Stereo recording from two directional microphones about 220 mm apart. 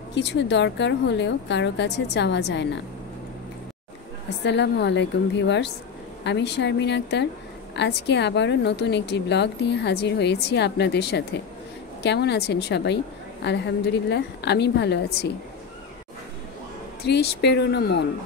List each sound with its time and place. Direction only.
0.1 s speech: 50° left (ahead or behind)
4.4 s speech: 50° left (ahead or behind)
17.0 s speech: 45° left (ahead or behind)